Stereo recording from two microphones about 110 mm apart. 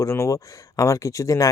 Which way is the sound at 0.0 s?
30° left (ahead or behind).